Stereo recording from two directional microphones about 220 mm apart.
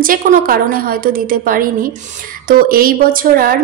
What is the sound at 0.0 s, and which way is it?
A woman's voice, 40° right (ahead or behind).